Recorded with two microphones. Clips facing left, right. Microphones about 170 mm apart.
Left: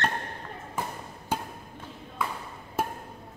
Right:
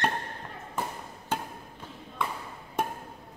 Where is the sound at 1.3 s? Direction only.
10° left (ahead or behind).